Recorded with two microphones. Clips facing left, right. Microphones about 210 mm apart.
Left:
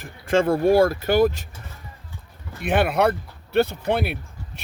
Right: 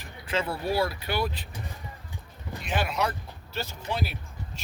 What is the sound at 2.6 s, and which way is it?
Speech, 60° left (ahead or behind).